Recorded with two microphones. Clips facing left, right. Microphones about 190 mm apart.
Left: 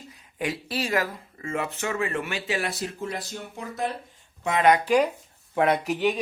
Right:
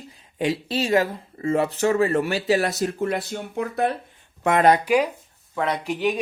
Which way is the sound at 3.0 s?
60° right (ahead or behind).